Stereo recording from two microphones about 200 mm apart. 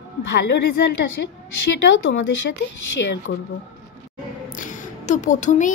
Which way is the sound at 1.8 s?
65° left (ahead or behind).